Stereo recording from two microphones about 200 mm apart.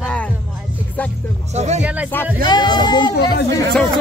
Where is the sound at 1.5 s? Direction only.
35° right (ahead or behind).